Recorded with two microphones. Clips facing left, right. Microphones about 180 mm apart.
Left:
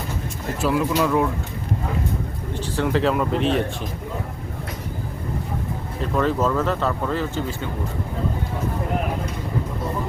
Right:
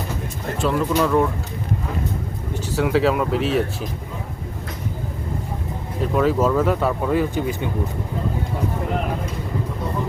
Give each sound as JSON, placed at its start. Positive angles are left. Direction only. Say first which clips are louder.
{"t": 0.6, "sound": "speech", "louder": "right 1 dB", "side_deg": 5}
{"t": 2.7, "sound": "speech", "louder": "right 2 dB", "side_deg": -5}
{"t": 6.0, "sound": "speech", "louder": "right 3 dB", "side_deg": -5}